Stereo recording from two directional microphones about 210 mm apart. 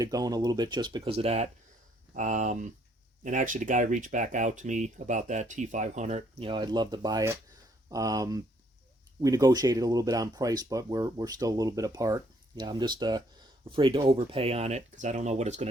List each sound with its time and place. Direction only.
0.0 s speech: 15° right (ahead or behind); by 15.7 s 30° right (ahead or behind)